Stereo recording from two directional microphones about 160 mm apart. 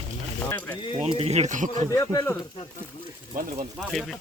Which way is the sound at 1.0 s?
40° right (ahead or behind).